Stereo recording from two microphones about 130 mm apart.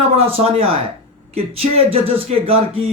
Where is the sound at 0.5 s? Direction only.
45° right (ahead or behind).